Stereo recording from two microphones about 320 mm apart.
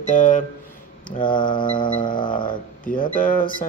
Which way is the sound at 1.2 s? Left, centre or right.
Centre.